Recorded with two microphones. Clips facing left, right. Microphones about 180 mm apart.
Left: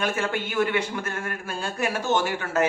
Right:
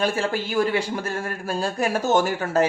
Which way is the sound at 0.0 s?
35° right (ahead or behind).